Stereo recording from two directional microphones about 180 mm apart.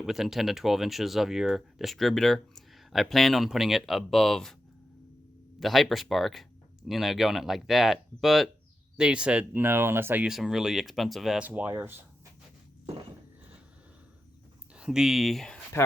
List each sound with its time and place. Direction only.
0.0 s speech: centre (ahead or behind)
5.5 s speech: centre (ahead or behind)
14.8 s speech: 5° right (ahead or behind)